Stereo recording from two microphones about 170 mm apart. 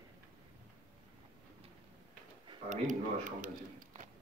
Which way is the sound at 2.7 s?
50° right (ahead or behind).